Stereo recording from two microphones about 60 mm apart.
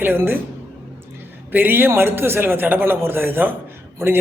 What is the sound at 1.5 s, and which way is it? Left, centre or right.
Speech, right.